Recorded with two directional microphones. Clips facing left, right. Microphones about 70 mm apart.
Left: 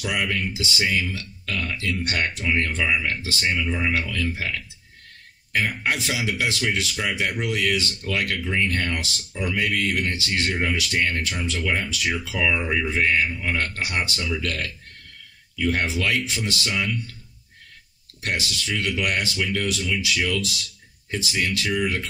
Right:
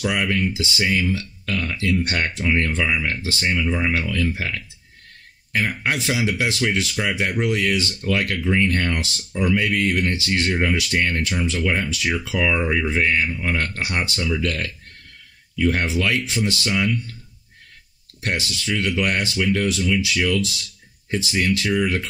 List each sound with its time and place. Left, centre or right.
0.0 s speech: right
5.9 s speech: right
15.5 s speech: right
18.2 s speech: right